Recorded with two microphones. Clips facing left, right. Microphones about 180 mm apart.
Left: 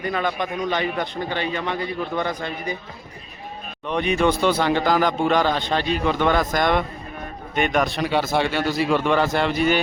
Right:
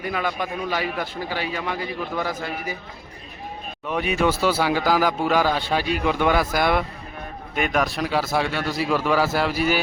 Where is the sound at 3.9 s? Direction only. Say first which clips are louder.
Left 2 dB; 5° right (ahead or behind).